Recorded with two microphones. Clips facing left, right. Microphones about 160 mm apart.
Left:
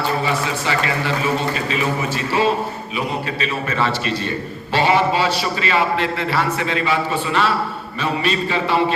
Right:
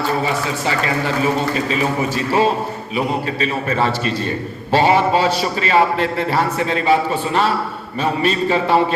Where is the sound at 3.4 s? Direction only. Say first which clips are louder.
Right 2 dB; 40° right (ahead or behind).